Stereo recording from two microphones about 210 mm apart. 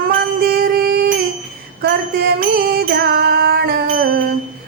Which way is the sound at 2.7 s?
50° right (ahead or behind).